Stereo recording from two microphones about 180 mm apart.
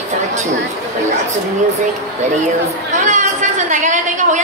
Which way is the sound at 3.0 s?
40° right (ahead or behind).